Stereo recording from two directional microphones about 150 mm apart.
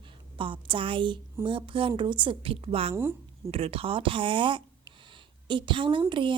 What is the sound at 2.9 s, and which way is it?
Speech, 15° right (ahead or behind).